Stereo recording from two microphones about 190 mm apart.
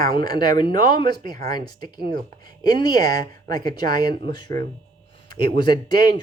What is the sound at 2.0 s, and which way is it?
Speech, 50° right (ahead or behind).